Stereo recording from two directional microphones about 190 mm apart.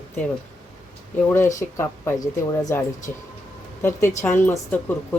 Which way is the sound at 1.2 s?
10° left (ahead or behind).